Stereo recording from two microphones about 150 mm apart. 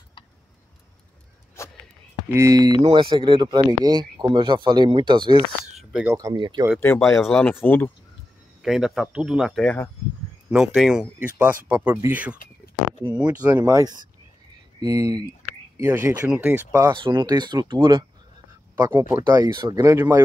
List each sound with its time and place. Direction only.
1.6 s a sound: 20° left (ahead or behind)
2.2 s speech: 20° right (ahead or behind)
2.8 s speech: 35° right (ahead or behind)
6.8 s speech: 15° left (ahead or behind)
8.6 s speech: centre (ahead or behind); by 15.2 s 25° right (ahead or behind)
15.8 s speech: 15° right (ahead or behind)
16.9 s speech: 30° right (ahead or behind)
18.8 s speech: 20° right (ahead or behind)